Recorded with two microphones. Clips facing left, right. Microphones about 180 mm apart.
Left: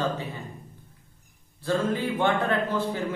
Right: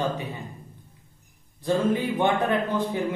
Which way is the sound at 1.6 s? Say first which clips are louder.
Right 2 dB; 15° right (ahead or behind).